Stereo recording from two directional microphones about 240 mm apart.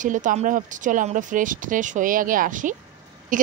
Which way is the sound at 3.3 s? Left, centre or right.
Right.